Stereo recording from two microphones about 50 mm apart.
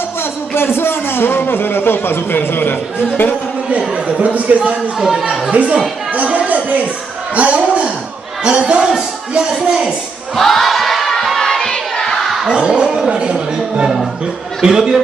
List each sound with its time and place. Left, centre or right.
0.6 s a man's voice: left
3.7 s speech: right
6.2 s a sound: right
7.3 s speech: right
10.3 s a sound: centre
12.4 s speech: centre